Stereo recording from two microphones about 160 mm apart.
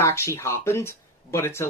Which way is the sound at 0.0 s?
15° left (ahead or behind).